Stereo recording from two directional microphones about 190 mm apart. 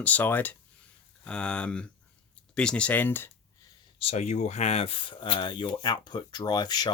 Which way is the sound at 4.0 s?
35° left (ahead or behind).